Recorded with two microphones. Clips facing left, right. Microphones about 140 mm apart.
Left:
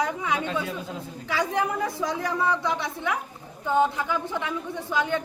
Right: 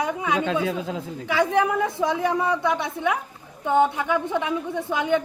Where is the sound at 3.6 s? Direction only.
25° right (ahead or behind).